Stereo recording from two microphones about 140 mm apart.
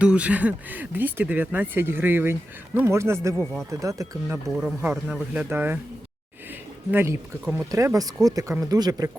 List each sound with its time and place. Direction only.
0.0 s speech: 10° right (ahead or behind)
6.9 s speech: 15° right (ahead or behind)